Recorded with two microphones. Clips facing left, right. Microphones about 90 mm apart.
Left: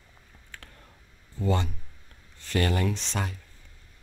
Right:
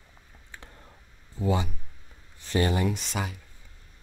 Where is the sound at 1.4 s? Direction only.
10° right (ahead or behind).